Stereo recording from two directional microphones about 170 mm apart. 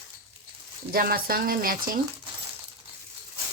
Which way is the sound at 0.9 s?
60° right (ahead or behind).